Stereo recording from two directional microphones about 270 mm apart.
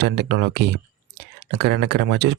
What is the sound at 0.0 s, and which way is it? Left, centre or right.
Speech, right.